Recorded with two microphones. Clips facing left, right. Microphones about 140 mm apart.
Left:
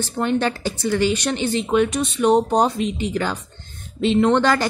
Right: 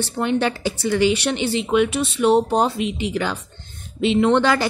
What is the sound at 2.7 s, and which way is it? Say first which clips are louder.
Speech: even; 40° left (ahead or behind).